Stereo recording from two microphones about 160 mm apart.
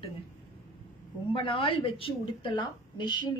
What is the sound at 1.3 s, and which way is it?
A woman's voice, 30° left (ahead or behind).